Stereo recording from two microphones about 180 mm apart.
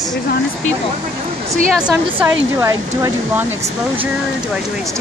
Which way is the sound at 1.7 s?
Centre (ahead or behind).